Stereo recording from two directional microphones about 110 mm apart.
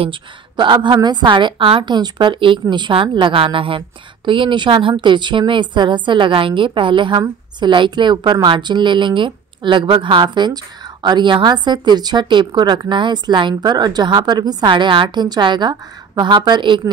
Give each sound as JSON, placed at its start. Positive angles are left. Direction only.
{"t": 0.0, "sound": "a woman's voice", "side_deg": -50}